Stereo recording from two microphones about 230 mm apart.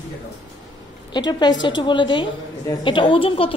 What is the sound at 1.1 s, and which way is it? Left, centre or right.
A woman's voice, centre.